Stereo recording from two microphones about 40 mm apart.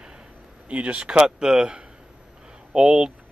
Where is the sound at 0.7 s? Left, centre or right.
Right.